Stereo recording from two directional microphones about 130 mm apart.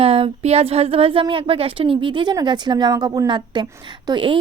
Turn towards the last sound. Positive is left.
turn(degrees=-40)  # may be behind; listen again after turning